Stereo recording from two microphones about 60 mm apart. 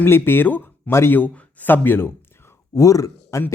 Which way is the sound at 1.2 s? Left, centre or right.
Left.